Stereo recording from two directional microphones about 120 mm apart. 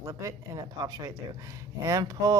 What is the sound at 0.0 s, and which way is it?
Speech, 25° right (ahead or behind).